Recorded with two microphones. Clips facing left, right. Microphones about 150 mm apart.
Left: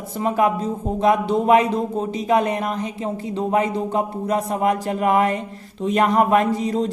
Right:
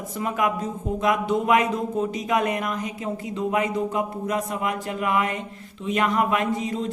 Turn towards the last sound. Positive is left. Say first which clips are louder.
# left 6 dB
turn(degrees=35)  # may be behind; listen again after turning